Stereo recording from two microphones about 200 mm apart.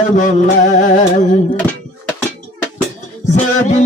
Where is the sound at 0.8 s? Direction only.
40° left (ahead or behind).